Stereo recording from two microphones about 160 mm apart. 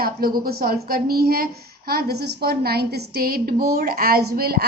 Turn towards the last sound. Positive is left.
turn(degrees=-75)  # may be behind; listen again after turning